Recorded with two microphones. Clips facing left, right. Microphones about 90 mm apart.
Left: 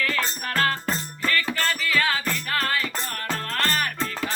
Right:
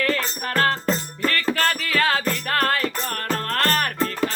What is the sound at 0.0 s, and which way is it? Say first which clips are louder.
Music: right 3 dB; 35° right (ahead or behind).